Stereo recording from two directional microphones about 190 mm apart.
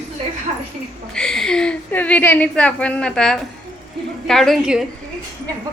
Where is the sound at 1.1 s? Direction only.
5° left (ahead or behind).